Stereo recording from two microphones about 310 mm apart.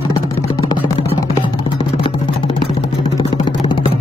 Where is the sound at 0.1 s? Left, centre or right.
Centre.